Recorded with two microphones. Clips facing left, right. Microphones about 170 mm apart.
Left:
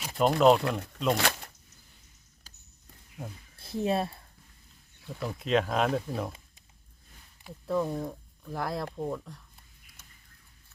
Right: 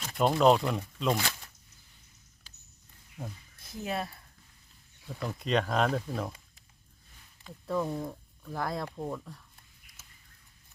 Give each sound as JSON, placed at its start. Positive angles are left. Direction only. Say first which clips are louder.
{"t": 0.2, "sound": "speech", "louder": "left 2 dB", "side_deg": 0}
{"t": 1.1, "sound": "speech", "louder": "left 3 dB", "side_deg": 65}
{"t": 2.5, "sound": "a sound", "louder": "left 3 dB", "side_deg": 40}
{"t": 3.6, "sound": "speech", "louder": "left 6 dB", "side_deg": 30}
{"t": 5.0, "sound": "speech", "louder": "left 1 dB", "side_deg": 0}
{"t": 7.4, "sound": "speech", "louder": "left 2 dB", "side_deg": 0}
{"t": 10.0, "sound": "a sound", "louder": "left 1 dB", "side_deg": -5}